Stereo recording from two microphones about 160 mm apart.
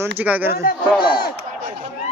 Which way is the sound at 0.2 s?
10° right (ahead or behind).